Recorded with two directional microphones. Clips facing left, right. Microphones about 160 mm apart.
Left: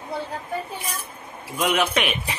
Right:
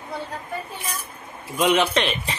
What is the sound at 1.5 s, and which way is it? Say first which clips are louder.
Speech: right 3 dB; 5° left (ahead or behind).